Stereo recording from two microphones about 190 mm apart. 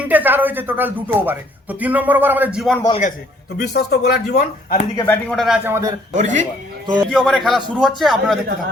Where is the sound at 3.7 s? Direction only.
55° left (ahead or behind).